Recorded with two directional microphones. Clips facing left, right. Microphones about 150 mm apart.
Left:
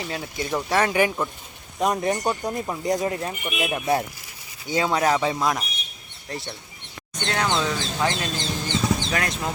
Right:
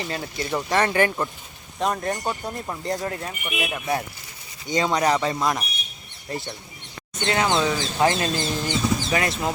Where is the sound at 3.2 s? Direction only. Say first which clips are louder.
Left 2 dB; 25° left (ahead or behind).